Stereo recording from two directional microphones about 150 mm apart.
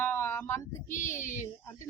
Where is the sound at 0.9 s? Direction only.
60° left (ahead or behind).